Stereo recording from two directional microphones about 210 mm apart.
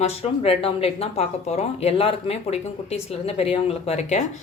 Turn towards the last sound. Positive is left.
turn(degrees=30)  # may be behind; listen again after turning